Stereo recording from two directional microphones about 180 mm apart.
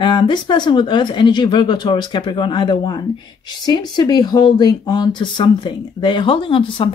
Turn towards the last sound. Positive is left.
turn(degrees=30)  # may be behind; listen again after turning